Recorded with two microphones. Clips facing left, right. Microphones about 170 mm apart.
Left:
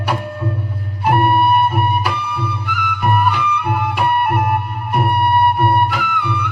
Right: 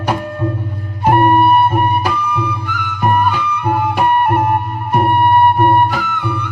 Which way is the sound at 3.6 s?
40° right (ahead or behind).